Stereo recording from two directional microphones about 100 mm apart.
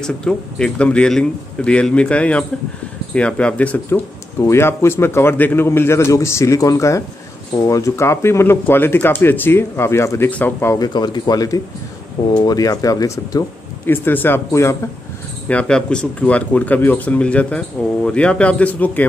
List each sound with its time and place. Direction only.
0.0 s speech: 5° left (ahead or behind)
10.7 s speech: 45° left (ahead or behind)
13.8 s speech: 20° left (ahead or behind)
15.4 s speech: 10° left (ahead or behind)